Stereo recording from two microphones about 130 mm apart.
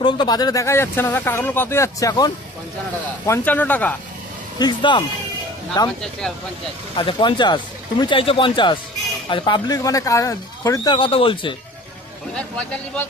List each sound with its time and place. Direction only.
0.0 s speech: 35° left (ahead or behind)
3.3 s speech: 15° left (ahead or behind)
4.6 s speech: 35° left (ahead or behind)
7.0 s speech: 40° left (ahead or behind)
9.8 s speech: 25° left (ahead or behind)
11.0 s speech: 40° left (ahead or behind)
12.4 s speech: 10° left (ahead or behind)